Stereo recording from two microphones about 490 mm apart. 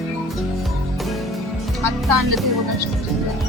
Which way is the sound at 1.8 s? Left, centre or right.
Right.